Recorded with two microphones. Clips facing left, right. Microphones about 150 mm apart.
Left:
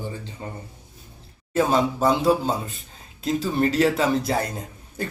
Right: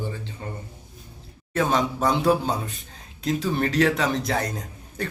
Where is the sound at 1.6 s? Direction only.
5° left (ahead or behind).